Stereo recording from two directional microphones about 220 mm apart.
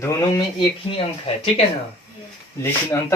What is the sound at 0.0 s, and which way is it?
Speech, 15° left (ahead or behind).